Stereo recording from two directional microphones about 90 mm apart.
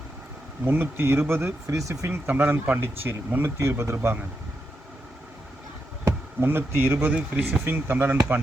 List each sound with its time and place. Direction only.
0.6 s speech: 25° right (ahead or behind)
2.2 s speech: 15° right (ahead or behind)
6.1 s speech: 30° right (ahead or behind)
7.1 s speech: 15° right (ahead or behind)